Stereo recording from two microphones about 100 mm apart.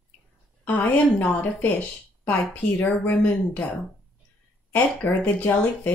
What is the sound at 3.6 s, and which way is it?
Speech, 15° left (ahead or behind).